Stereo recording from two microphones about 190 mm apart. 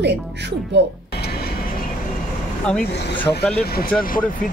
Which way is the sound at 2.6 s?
5° left (ahead or behind).